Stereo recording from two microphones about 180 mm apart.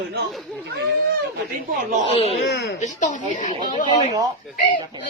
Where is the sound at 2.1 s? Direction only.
35° left (ahead or behind).